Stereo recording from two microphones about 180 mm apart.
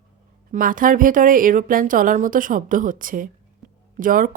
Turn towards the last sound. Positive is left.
turn(degrees=-50)  # may be behind; listen again after turning